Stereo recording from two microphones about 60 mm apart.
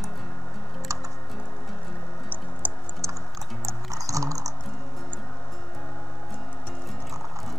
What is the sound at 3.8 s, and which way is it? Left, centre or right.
Music, right.